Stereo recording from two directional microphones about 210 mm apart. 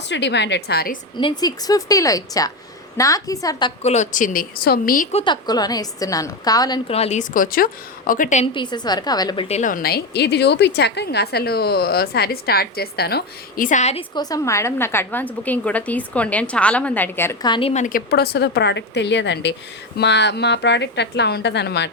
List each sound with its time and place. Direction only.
0.1 s a woman's voice: 55° left (ahead or behind)
1.1 s a woman's voice: 20° left (ahead or behind)
3.8 s speech: 35° left (ahead or behind)
5.1 s a woman's voice: 20° left (ahead or behind); by 8.4 s 35° left (ahead or behind)
8.5 s a woman's voice: 20° left (ahead or behind)
17.5 s a woman's voice: 25° left (ahead or behind)
17.8 s a woman's voice: 45° left (ahead or behind)